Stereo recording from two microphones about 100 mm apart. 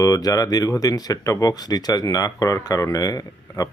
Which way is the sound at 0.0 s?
35° left (ahead or behind).